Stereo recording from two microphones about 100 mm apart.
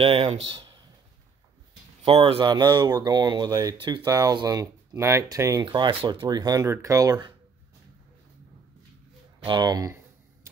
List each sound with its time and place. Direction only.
0.0 s a man's voice: 70° right (ahead or behind); by 0.8 s 55° right (ahead or behind)
2.0 s speech: 65° right (ahead or behind)
2.4 s speech: 45° right (ahead or behind)
4.1 s speech: 40° right (ahead or behind)
5.7 s speech: 55° right (ahead or behind); by 7.2 s 35° right (ahead or behind)
9.5 s speech: 40° right (ahead or behind)
10.4 s tick-tock: 30° right (ahead or behind)